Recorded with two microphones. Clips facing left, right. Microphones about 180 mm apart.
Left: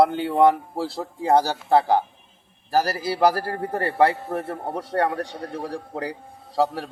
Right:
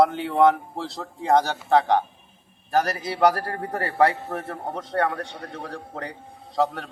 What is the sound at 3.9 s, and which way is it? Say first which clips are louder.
Speech: even; centre (ahead or behind).